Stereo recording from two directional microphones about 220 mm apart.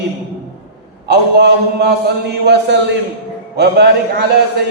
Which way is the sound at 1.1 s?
50° right (ahead or behind).